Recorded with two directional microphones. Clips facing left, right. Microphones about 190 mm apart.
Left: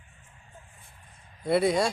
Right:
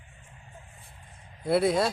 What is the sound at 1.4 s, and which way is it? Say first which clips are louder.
Speech: even; centre (ahead or behind).